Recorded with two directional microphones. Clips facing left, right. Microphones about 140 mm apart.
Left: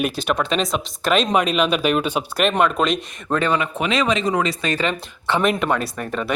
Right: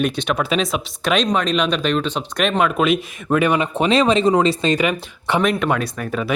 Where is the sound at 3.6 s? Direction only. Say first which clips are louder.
Right 5 dB; 30° right (ahead or behind).